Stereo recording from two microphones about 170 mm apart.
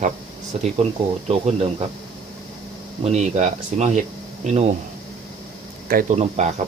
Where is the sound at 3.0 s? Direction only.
40° right (ahead or behind).